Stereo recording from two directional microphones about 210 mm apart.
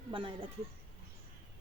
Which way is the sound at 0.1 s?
25° right (ahead or behind).